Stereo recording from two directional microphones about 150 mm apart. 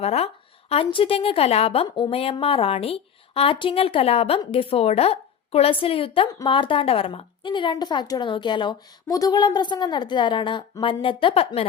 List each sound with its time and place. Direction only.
0.0 s a woman's voice: 45° left (ahead or behind)